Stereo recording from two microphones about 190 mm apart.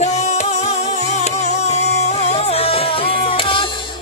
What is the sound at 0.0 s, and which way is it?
Music, 35° left (ahead or behind).